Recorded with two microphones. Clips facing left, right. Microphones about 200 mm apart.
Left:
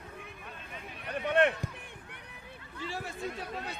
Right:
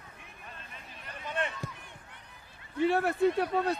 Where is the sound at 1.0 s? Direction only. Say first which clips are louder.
Left 9 dB; 65° left (ahead or behind).